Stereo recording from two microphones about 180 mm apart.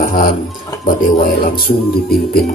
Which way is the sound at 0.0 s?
50° left (ahead or behind).